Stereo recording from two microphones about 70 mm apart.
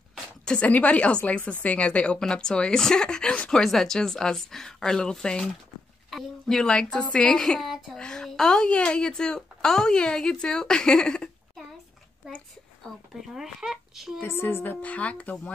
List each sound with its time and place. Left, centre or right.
0.6 s a woman's voice: left
7.6 s speech: centre
8.0 s a woman's voice: centre
13.1 s speech: centre
14.2 s speech: left; by 15.5 s centre